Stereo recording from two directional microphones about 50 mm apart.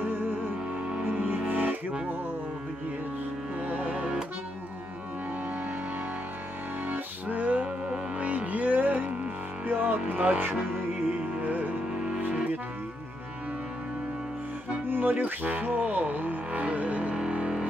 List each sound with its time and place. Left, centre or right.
1.0 s music: right
3.7 s music: right
6.9 s music: right
9.7 s vehicle: right
10.0 s speech: right
11.1 s music: right
14.9 s music: right; by 17.6 s centre